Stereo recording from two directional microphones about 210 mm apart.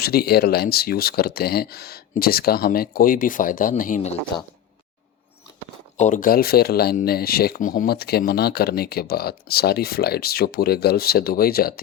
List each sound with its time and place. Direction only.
0.0 s speech: 50° left (ahead or behind)
6.0 s speech: 35° left (ahead or behind)